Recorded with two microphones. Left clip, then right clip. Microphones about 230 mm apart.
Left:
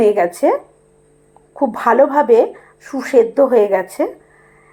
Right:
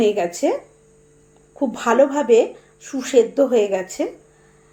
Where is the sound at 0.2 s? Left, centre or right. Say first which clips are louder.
Left 6 dB; centre.